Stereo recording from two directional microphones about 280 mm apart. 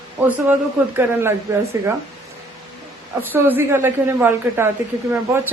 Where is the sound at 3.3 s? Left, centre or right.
Centre.